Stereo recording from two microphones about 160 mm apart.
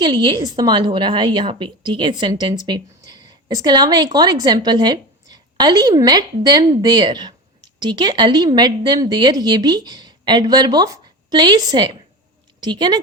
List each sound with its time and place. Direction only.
0.0 s a woman's voice: 30° right (ahead or behind)